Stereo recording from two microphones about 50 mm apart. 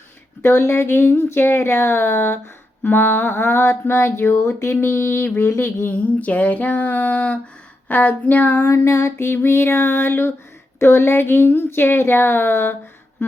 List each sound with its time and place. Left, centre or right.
0.6 s speech: left
2.8 s a sound: left
5.5 s speech: left
5.9 s a sound: left
8.6 s speech: left
10.8 s speech: left